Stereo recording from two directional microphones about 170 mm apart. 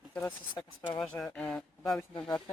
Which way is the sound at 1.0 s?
5° left (ahead or behind).